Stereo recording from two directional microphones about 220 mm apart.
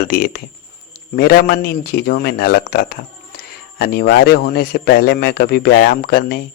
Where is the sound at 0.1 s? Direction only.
45° left (ahead or behind).